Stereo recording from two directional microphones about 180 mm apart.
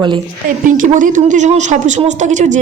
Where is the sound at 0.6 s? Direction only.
45° right (ahead or behind).